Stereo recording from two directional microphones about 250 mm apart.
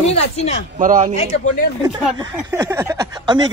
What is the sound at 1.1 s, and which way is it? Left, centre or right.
Speech, left.